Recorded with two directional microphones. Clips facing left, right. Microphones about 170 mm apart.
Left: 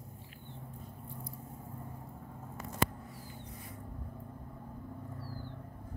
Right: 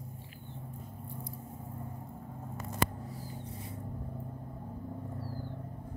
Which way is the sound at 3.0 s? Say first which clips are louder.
Right 5 dB; 35° right (ahead or behind).